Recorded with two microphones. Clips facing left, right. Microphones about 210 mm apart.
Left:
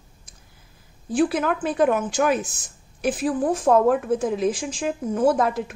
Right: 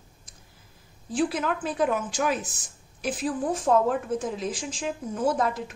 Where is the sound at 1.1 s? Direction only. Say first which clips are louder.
Left 5 dB; 60° left (ahead or behind).